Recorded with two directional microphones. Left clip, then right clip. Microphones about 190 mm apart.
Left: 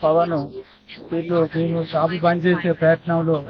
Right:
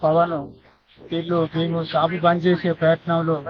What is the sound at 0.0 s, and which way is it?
Speech, 10° left (ahead or behind).